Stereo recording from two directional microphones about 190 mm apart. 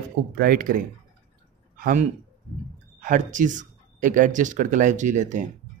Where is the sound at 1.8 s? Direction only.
45° right (ahead or behind).